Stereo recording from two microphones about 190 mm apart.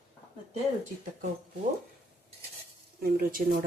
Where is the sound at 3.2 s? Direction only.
50° right (ahead or behind).